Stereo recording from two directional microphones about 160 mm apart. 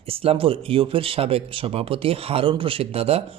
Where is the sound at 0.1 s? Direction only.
35° right (ahead or behind).